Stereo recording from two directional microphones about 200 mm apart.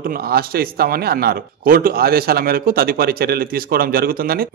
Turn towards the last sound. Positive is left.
turn(degrees=-50)  # may be behind; listen again after turning